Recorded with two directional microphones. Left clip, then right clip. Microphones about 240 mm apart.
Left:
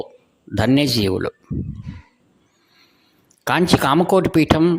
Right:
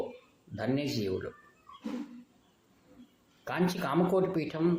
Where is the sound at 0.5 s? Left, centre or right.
Left.